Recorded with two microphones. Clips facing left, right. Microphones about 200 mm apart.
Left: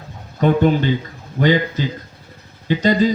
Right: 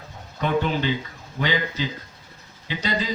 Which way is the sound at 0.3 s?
45° left (ahead or behind).